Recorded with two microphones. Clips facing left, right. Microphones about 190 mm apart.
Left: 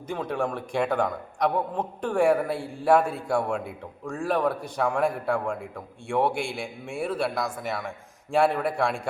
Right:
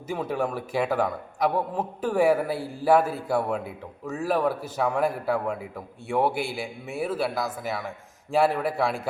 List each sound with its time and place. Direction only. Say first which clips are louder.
0.1 s a man's voice: right 1 dB; 5° right (ahead or behind)